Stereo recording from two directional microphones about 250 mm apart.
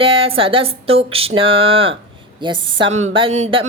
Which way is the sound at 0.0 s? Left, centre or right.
Right.